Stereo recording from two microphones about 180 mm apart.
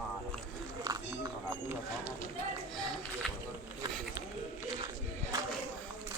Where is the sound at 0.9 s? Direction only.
20° right (ahead or behind).